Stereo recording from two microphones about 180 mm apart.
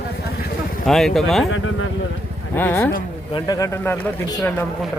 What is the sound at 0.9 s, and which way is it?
Speech, centre (ahead or behind).